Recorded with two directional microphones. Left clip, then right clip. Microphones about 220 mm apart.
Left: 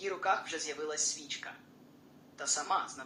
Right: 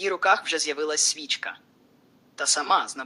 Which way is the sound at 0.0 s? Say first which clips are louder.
Right 11 dB; 45° right (ahead or behind).